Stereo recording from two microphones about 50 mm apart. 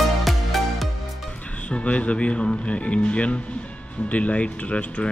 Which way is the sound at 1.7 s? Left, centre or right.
Left.